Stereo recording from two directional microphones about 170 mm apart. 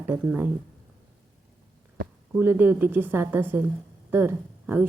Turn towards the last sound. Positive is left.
turn(degrees=-10)  # may be behind; listen again after turning